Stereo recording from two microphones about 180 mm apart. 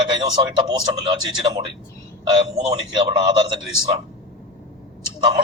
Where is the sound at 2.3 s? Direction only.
25° right (ahead or behind).